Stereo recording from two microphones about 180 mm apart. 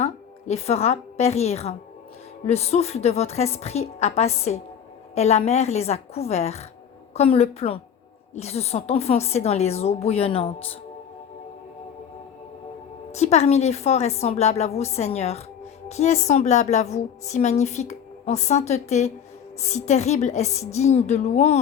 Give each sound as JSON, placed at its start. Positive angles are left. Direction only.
{"t": 0.0, "sound": "a woman's voice", "side_deg": 35}
{"t": 13.1, "sound": "a woman's voice", "side_deg": 35}